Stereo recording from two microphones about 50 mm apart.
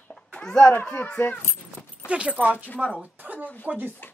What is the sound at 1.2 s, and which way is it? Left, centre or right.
Speech, left.